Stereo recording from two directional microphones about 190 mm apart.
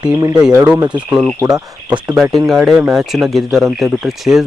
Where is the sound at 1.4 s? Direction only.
15° right (ahead or behind).